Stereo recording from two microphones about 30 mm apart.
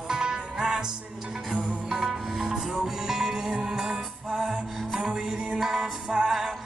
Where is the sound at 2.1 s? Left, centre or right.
Centre.